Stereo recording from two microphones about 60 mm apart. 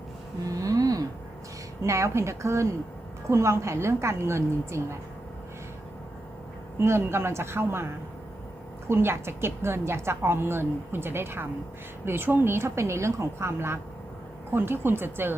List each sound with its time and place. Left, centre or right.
0.6 s a sound: right
1.8 s a woman's voice: right
6.7 s a woman's voice: right
8.9 s a woman's voice: right